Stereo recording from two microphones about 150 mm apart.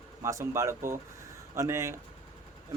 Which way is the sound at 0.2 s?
20° right (ahead or behind).